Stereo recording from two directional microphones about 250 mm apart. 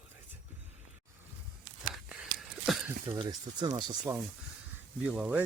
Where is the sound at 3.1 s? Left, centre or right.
Centre.